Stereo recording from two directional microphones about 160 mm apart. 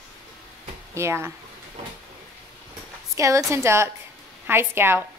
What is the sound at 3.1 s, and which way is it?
A woman's voice, 20° right (ahead or behind).